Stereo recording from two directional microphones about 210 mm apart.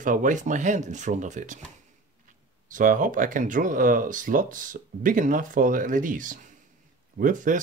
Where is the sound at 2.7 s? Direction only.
40° right (ahead or behind).